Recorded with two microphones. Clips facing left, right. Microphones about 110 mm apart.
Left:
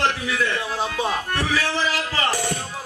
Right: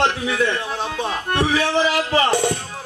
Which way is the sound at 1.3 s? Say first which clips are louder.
Right 5 dB; 25° right (ahead or behind).